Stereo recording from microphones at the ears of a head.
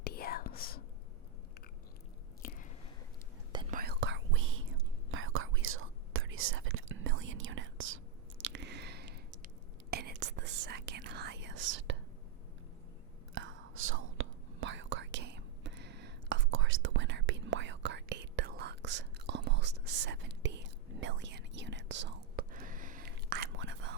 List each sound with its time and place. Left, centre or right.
0.0 s whispering: left
3.7 s whispering: right
8.4 s a sound: right
9.9 s whispering: right
13.3 s whispering: right